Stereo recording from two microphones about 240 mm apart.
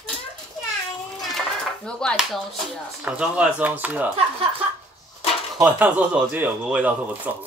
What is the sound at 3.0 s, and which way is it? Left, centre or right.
Speech, centre.